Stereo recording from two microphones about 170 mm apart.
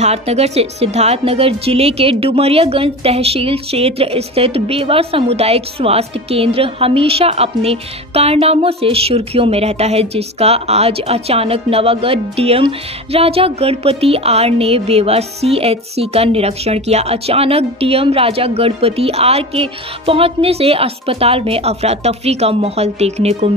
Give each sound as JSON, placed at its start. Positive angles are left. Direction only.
{"t": 0.0, "sound": "a woman's voice", "side_deg": -40}